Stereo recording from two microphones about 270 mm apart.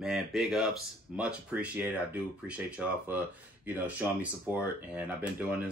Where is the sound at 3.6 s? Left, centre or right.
Centre.